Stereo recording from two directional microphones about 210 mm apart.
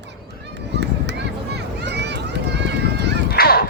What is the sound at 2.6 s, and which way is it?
Run, 55° right (ahead or behind).